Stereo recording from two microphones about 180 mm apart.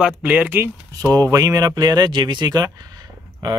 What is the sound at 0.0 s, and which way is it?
Speech, 10° right (ahead or behind).